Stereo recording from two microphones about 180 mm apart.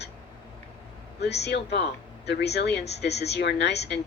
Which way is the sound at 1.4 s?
70° left (ahead or behind).